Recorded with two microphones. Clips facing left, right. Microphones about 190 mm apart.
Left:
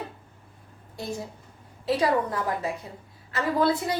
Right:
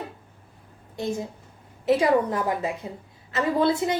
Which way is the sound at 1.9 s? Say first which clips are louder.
Right 4 dB; 25° right (ahead or behind).